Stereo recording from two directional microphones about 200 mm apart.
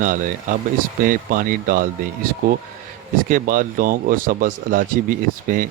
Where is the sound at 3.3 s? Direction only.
40° right (ahead or behind).